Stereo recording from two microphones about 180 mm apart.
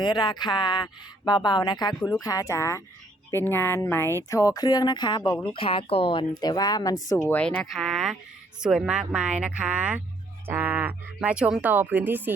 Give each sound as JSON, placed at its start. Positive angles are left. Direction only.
{"t": 0.0, "sound": "a woman's voice", "side_deg": 25}